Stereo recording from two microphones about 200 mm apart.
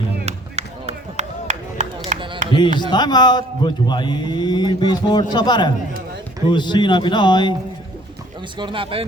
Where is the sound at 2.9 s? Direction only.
20° left (ahead or behind).